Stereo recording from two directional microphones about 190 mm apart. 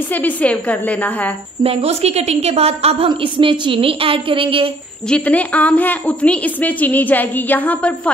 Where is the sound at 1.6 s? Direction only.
35° right (ahead or behind).